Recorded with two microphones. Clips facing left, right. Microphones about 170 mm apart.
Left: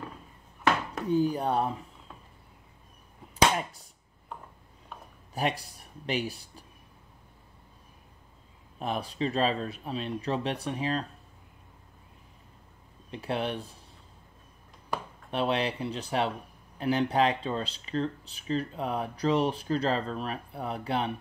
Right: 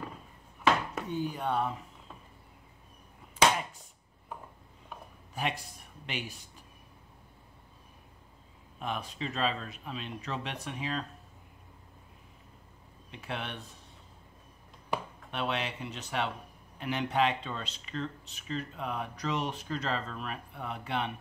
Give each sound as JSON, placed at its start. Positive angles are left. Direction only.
{"t": 1.0, "sound": "speech", "side_deg": 35}
{"t": 5.3, "sound": "speech", "side_deg": 35}
{"t": 8.7, "sound": "speech", "side_deg": 35}
{"t": 13.1, "sound": "speech", "side_deg": 35}
{"t": 15.3, "sound": "speech", "side_deg": 35}